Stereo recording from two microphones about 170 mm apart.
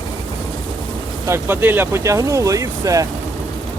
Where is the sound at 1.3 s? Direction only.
10° right (ahead or behind).